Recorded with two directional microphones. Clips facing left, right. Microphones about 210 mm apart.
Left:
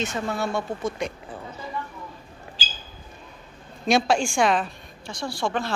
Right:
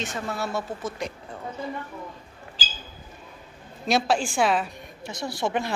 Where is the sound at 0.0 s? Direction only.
Centre (ahead or behind).